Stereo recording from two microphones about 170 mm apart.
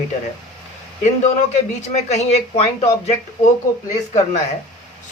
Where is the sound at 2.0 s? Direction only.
40° left (ahead or behind).